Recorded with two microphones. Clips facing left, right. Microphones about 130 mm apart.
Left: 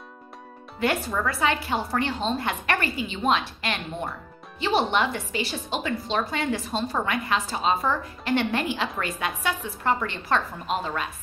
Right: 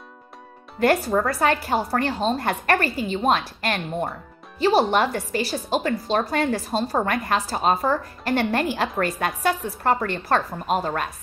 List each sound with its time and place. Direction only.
0.7 s a woman's voice: 40° right (ahead or behind)